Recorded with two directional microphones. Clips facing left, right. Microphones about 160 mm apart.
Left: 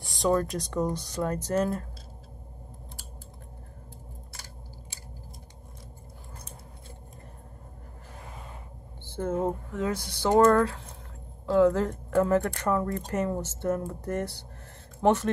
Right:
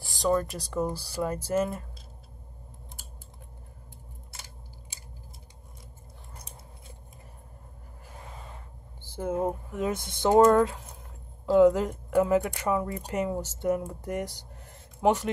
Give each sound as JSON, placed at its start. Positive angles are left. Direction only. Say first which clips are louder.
{"t": 0.0, "sound": "speech", "louder": "left 1 dB", "side_deg": 0}
{"t": 9.0, "sound": "speech", "louder": "even", "side_deg": -10}